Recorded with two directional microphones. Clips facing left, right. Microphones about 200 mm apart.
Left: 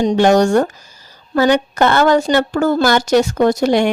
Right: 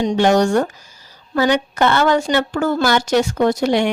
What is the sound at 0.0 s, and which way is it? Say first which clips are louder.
A woman's voice: left 3 dB; 40° left (ahead or behind).